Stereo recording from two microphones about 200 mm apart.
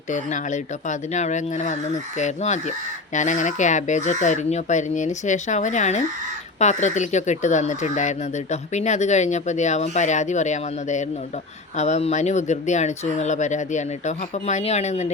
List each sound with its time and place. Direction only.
0.1 s speech: 40° left (ahead or behind)